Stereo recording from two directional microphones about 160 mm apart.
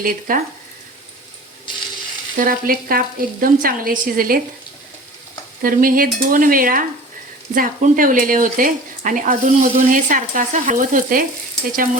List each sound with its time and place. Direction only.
0.0 s speech: 60° right (ahead or behind)
2.4 s speech: 65° right (ahead or behind)
5.6 s speech: 60° right (ahead or behind)